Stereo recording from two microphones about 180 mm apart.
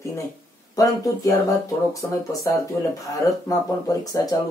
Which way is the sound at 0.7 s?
20° left (ahead or behind).